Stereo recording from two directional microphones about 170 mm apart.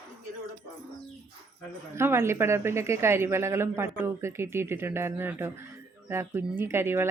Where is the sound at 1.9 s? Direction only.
15° right (ahead or behind).